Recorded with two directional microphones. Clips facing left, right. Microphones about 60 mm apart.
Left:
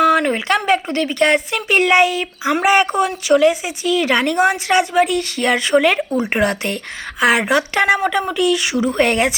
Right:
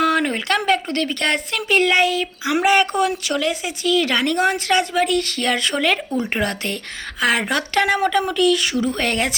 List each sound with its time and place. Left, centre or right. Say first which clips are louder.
0.0 s speech: left 4 dB; centre